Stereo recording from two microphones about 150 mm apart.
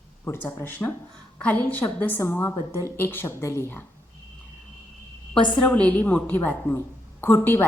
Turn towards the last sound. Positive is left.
turn(degrees=15)  # may be behind; listen again after turning